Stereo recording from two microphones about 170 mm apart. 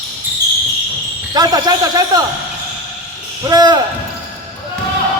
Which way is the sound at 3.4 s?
20° right (ahead or behind).